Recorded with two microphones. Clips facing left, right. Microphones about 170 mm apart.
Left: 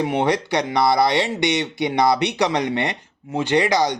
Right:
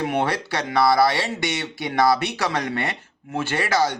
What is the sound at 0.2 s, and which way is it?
Speech, 15° left (ahead or behind).